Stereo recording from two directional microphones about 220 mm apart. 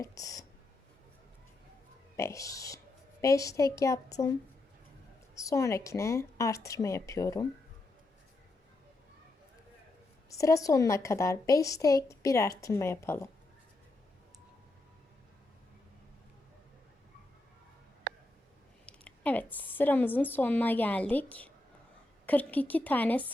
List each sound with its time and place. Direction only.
0.0 s a woman's voice: 15° left (ahead or behind)
2.1 s a woman's voice: 15° left (ahead or behind)
5.3 s a woman's voice: 15° left (ahead or behind)
10.2 s a woman's voice: 15° left (ahead or behind)
18.1 s a sound: 50° right (ahead or behind)
18.9 s a woman's voice: 5° left (ahead or behind)